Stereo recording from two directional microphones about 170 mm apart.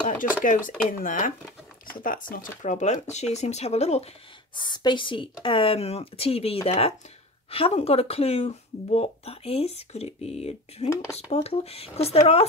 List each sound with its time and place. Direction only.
0.4 s speech: 50° left (ahead or behind)
4.6 s speech: 25° left (ahead or behind)